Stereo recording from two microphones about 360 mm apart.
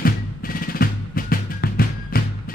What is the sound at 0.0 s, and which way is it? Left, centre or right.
Music, left.